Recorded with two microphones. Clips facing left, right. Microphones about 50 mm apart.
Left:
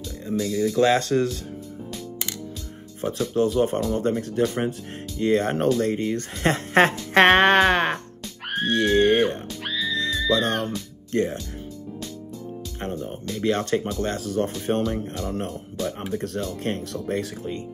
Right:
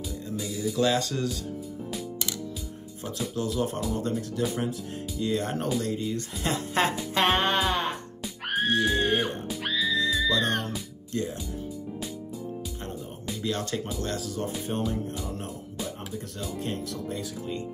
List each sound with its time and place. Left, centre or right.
0.7 s speech: left
3.3 s speech: left
7.2 s speech: left
8.5 s music: centre
8.7 s speech: left
9.5 s music: centre
11.1 s speech: left
13.4 s speech: left
16.1 s speech: left